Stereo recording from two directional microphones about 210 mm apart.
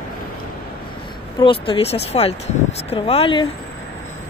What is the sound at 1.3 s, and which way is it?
Speech, 25° left (ahead or behind).